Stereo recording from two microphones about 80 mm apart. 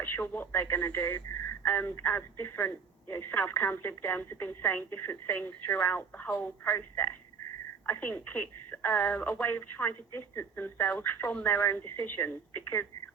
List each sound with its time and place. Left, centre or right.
0.0 s speech: left